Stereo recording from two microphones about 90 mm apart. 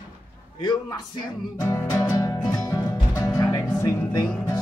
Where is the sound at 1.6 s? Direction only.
35° left (ahead or behind).